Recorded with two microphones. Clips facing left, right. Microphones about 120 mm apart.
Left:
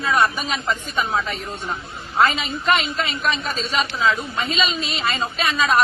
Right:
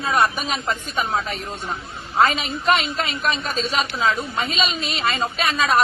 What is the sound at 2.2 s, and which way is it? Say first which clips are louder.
A woman's voice: even; 40° right (ahead or behind).